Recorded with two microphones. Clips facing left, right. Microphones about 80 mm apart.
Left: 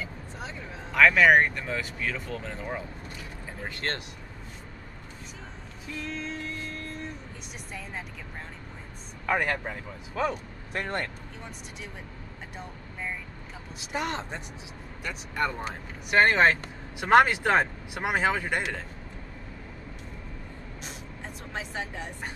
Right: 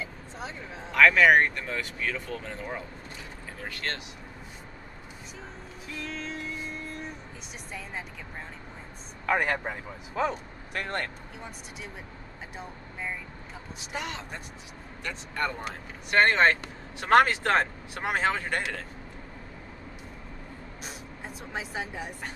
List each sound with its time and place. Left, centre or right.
0.9 s speech: centre
3.6 s speech: left
6.0 s vehicle: centre
9.3 s speech: centre
10.7 s speech: left
13.9 s speech: left
15.0 s speech: centre
21.5 s speech: centre